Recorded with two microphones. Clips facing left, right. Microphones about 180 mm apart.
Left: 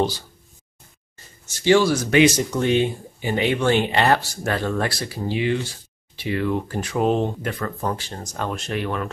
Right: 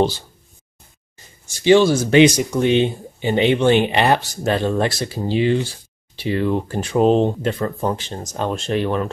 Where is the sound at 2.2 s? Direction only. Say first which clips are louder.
Right 3 dB; 15° right (ahead or behind).